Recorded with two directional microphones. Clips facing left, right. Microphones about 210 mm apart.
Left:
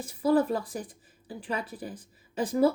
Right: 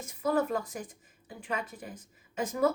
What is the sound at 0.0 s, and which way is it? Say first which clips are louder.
A woman's voice: left 5 dB; 35° left (ahead or behind).